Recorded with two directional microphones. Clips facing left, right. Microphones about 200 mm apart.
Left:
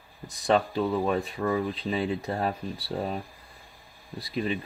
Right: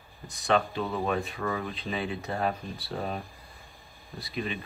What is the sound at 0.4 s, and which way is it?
Speech, 35° left (ahead or behind).